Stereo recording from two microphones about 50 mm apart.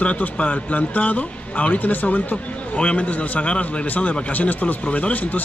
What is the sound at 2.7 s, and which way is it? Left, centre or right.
Speech, left.